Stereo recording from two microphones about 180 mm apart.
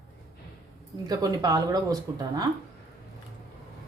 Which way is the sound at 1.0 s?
20° right (ahead or behind).